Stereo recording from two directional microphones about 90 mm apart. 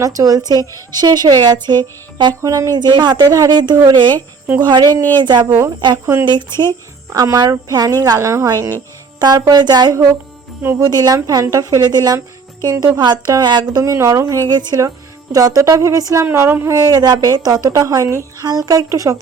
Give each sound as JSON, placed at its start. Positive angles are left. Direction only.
{"t": 0.0, "sound": "a woman's voice", "side_deg": -40}
{"t": 1.8, "sound": "music", "side_deg": -55}
{"t": 2.4, "sound": "a woman's voice", "side_deg": -40}
{"t": 5.5, "sound": "speech", "side_deg": -30}
{"t": 5.8, "sound": "speech", "side_deg": -55}
{"t": 7.1, "sound": "a woman's voice", "side_deg": -40}
{"t": 9.1, "sound": "a woman's voice", "side_deg": -45}
{"t": 11.8, "sound": "a woman's voice", "side_deg": -50}
{"t": 13.8, "sound": "speech", "side_deg": -35}
{"t": 14.5, "sound": "a woman's voice", "side_deg": -50}
{"t": 14.8, "sound": "speech", "side_deg": -40}
{"t": 16.2, "sound": "speech", "side_deg": -25}
{"t": 16.7, "sound": "a woman's voice", "side_deg": -45}
{"t": 18.9, "sound": "speech", "side_deg": -35}